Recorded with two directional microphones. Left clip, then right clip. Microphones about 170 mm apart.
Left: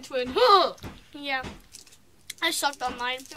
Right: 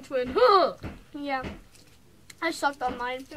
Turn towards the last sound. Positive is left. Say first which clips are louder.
# even
turn(degrees=15)  # may be behind; listen again after turning